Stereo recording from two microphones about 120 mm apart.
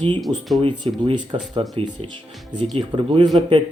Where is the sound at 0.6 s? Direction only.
40° right (ahead or behind).